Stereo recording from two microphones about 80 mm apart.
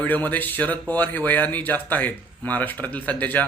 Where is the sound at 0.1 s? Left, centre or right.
Left.